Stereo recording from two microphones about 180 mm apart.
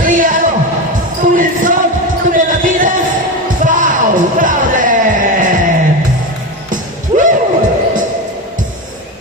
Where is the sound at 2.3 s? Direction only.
50° right (ahead or behind).